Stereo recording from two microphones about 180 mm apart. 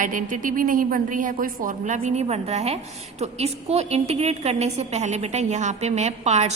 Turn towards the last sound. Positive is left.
turn(degrees=-40)  # may be behind; listen again after turning